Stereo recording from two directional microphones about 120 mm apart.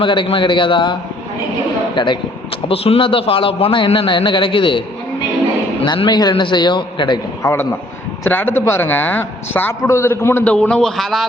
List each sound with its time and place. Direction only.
0.0 s a man's voice: 45° left (ahead or behind)
2.0 s a man's voice: 40° left (ahead or behind)
2.6 s a man's voice: 55° left (ahead or behind)
5.8 s a man's voice: 40° left (ahead or behind)
7.4 s a man's voice: 20° left (ahead or behind)
10.4 s a man's voice: 10° left (ahead or behind)